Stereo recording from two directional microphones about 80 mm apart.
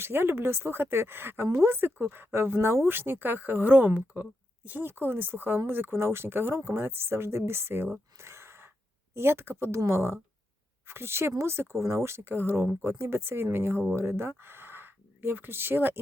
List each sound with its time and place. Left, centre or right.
0.0 s speech: right
8.2 s gasp: right
9.1 s speech: right